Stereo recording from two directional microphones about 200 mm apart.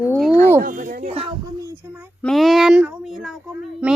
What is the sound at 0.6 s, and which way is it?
Speech, 40° right (ahead or behind).